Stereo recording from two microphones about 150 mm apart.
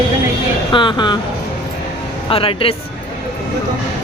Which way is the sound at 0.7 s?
30° left (ahead or behind).